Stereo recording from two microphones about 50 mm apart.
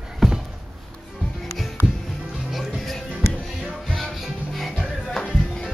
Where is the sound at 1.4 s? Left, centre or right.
Centre.